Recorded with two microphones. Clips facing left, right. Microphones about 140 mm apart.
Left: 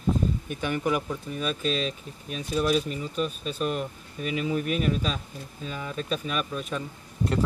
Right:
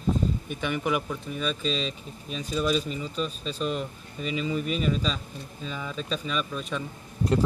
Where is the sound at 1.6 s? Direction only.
50° left (ahead or behind).